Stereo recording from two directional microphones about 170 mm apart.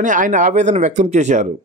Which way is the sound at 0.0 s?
50° right (ahead or behind).